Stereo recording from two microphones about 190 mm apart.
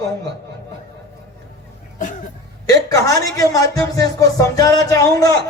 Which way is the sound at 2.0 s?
40° left (ahead or behind).